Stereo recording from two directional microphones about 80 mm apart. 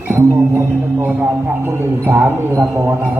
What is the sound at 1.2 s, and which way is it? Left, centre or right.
A man's voice, right.